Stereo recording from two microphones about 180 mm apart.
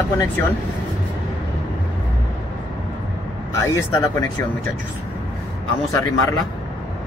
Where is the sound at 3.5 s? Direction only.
15° left (ahead or behind).